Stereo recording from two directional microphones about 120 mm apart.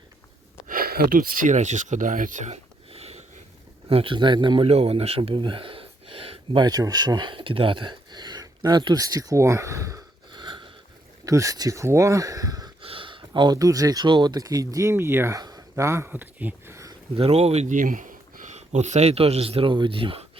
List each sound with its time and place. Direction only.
1.5 s speech: 85° right
2.9 s sniff: 60° right (ahead or behind)
3.8 s speech: 50° right (ahead or behind)
6.7 s speech: 30° right (ahead or behind)
10.3 s sniff: 40° right (ahead or behind)
11.3 s speech: 25° right (ahead or behind)
12.8 s speech: 50° right (ahead or behind); by 15.4 s 20° right (ahead or behind)
15.4 s a sound: 35° right (ahead or behind)
15.7 s speech: 20° right (ahead or behind)
17.2 s speech: 55° right (ahead or behind)